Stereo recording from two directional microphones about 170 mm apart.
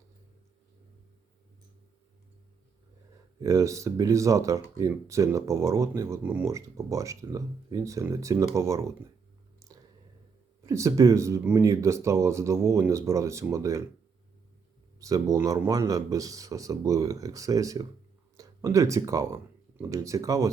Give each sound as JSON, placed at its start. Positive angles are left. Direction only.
{"t": 3.4, "sound": "speech", "side_deg": -20}
{"t": 10.6, "sound": "speech", "side_deg": -20}
{"t": 14.9, "sound": "speech", "side_deg": -20}